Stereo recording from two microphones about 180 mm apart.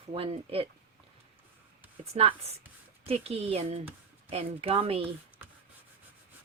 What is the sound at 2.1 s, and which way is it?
Rub, 35° right (ahead or behind).